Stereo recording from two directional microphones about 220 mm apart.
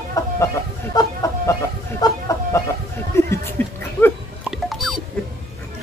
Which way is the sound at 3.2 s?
10° left (ahead or behind).